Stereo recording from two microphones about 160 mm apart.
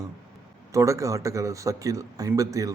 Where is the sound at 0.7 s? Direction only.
20° right (ahead or behind).